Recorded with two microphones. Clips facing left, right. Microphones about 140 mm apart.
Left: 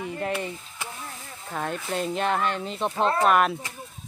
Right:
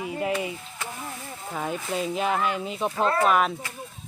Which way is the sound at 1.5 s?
5° right (ahead or behind).